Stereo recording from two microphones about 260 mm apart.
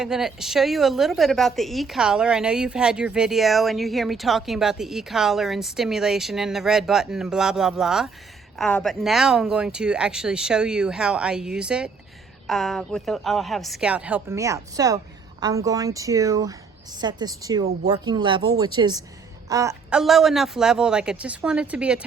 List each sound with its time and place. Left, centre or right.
0.0 s a woman's voice: centre